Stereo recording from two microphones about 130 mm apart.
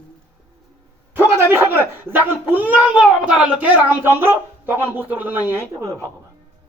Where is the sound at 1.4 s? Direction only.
15° right (ahead or behind).